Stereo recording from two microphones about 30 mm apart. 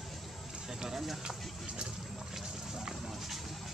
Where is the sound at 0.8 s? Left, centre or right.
Centre.